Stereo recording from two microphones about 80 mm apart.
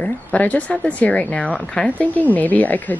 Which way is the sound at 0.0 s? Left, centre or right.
Centre.